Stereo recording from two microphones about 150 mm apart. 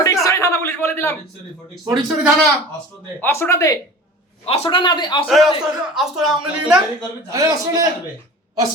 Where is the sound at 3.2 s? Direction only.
15° left (ahead or behind).